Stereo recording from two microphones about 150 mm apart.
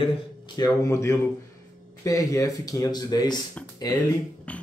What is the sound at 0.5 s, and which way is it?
Speech, 25° left (ahead or behind).